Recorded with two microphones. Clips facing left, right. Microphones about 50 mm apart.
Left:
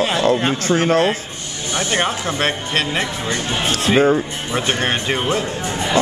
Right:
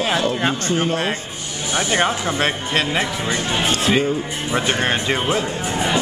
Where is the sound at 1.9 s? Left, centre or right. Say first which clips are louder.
Right 1 dB; centre.